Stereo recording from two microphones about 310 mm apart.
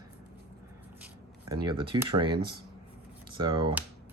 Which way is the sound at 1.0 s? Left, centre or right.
Centre.